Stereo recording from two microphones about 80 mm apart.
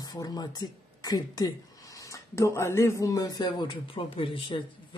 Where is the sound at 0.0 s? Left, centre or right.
Left.